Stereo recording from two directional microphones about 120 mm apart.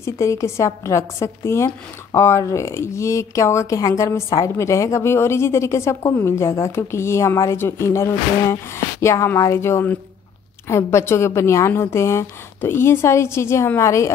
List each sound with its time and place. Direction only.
0.0 s a woman's voice: 25° left (ahead or behind)